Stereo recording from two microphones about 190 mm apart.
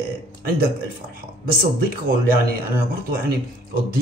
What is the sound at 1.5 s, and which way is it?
Speech, 50° right (ahead or behind).